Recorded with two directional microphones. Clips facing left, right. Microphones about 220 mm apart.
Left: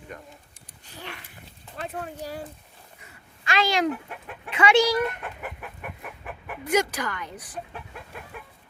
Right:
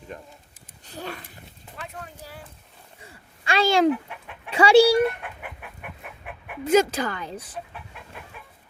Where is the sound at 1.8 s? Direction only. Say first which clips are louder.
Left 6 dB; 40° left (ahead or behind).